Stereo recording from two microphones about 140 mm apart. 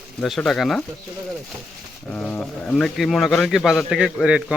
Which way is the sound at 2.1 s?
10° left (ahead or behind).